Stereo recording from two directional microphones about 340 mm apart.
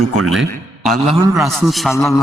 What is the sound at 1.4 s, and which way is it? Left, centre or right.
Speech, centre.